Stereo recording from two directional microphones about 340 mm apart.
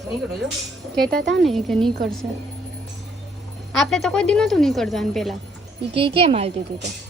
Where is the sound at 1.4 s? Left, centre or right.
Centre.